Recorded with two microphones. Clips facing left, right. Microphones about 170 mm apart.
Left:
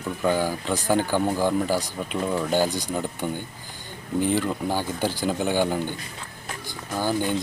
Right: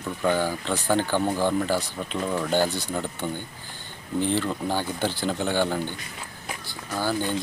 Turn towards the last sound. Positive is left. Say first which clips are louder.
# left 2 dB
turn(degrees=15)  # may be behind; listen again after turning